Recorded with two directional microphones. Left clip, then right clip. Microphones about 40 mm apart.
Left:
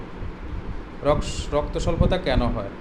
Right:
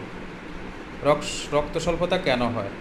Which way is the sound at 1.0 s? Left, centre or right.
Left.